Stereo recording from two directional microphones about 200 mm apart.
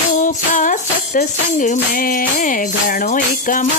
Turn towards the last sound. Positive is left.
turn(degrees=40)  # may be behind; listen again after turning